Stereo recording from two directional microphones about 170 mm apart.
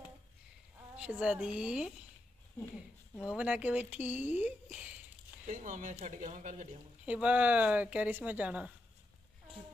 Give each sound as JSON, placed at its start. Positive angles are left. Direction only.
{"t": 0.9, "sound": "speech", "side_deg": -5}
{"t": 3.3, "sound": "speech", "side_deg": -5}
{"t": 5.5, "sound": "speech", "side_deg": -50}
{"t": 7.1, "sound": "speech", "side_deg": -10}